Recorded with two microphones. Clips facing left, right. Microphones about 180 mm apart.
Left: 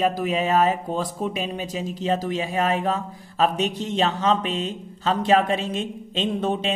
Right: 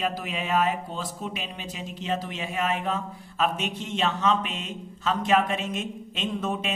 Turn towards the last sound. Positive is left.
turn(degrees=30)  # may be behind; listen again after turning